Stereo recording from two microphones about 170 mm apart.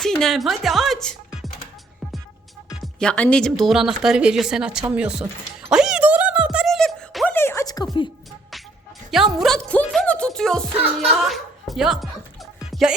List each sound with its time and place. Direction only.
0.0 s music: centre (ahead or behind)
2.8 s speech: 5° left (ahead or behind)
5.7 s a sound: 5° right (ahead or behind)
7.3 s a sound: 15° left (ahead or behind)
9.0 s music: centre (ahead or behind)
11.0 s speech: centre (ahead or behind)
12.7 s music: centre (ahead or behind)